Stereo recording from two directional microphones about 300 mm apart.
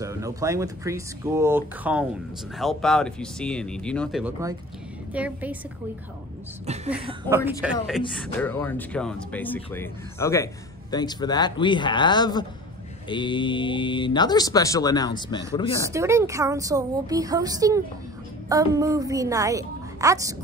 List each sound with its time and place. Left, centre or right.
0.0 s speech: centre
6.6 s speech: right
7.1 s speech: centre
8.0 s speech: centre
15.9 s speech: centre